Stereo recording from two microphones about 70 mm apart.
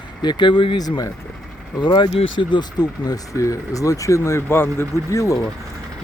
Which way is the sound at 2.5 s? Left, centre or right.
Left.